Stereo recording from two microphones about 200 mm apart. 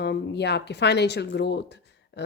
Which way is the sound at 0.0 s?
55° left (ahead or behind).